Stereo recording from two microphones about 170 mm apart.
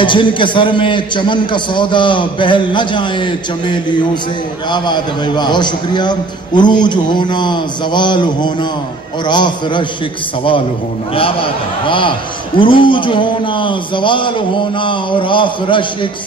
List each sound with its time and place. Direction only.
0.0 s a man's voice: 30° left (ahead or behind)
11.1 s a man's voice: 30° left (ahead or behind)